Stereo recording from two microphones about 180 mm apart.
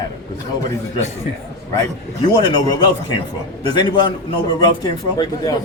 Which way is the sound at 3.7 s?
25° left (ahead or behind).